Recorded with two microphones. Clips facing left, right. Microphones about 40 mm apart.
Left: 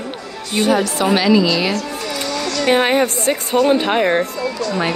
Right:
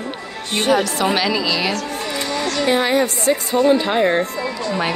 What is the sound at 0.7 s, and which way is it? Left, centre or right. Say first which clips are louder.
A woman's voice: even; centre.